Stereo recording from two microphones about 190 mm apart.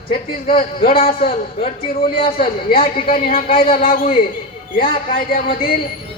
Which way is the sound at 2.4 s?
50° left (ahead or behind).